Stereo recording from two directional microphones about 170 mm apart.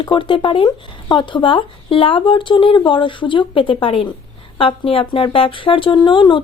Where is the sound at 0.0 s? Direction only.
30° left (ahead or behind).